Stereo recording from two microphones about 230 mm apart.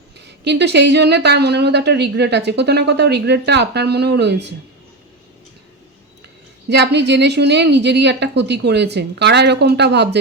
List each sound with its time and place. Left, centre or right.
0.4 s a woman's voice: right
6.7 s a woman's voice: right